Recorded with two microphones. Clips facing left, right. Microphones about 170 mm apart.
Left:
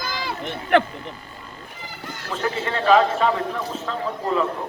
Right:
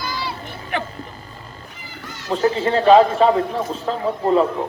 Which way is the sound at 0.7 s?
65° left (ahead or behind).